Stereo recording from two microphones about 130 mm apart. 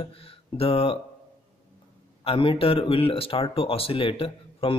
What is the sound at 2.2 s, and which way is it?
Speech, 45° left (ahead or behind).